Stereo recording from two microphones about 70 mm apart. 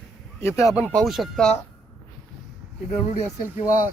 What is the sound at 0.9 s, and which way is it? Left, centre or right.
Speech, centre.